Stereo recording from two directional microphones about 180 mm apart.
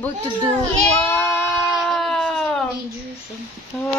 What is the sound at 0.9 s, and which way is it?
Goat, 15° left (ahead or behind).